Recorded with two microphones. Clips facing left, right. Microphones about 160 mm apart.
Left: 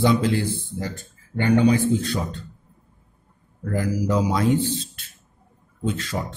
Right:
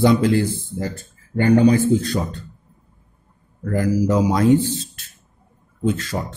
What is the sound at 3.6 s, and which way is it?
Speech, 45° right (ahead or behind).